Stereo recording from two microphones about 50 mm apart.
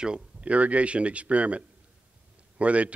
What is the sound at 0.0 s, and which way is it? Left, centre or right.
A man's voice, right.